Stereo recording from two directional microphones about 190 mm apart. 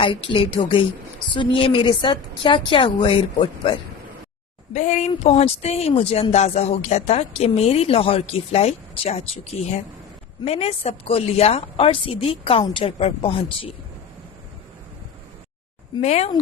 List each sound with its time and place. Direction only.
0.0 s a woman's voice: 25° left (ahead or behind)
4.7 s a woman's voice: 40° left (ahead or behind)
16.0 s speech: 35° left (ahead or behind)